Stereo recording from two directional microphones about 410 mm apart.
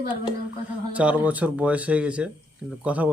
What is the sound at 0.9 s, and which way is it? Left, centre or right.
Speech, centre.